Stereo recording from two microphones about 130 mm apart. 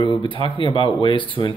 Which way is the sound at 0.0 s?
40° left (ahead or behind).